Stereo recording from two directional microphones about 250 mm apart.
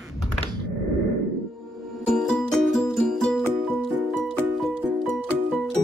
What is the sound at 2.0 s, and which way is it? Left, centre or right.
Music, centre.